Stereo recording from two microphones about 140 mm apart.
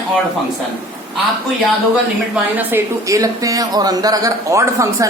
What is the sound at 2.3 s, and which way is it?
Speech, 15° right (ahead or behind).